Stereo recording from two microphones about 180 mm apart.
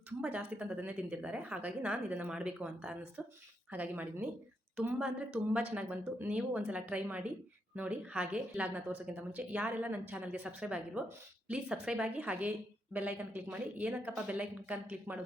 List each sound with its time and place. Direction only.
0.2 s a woman's voice: 5° right (ahead or behind)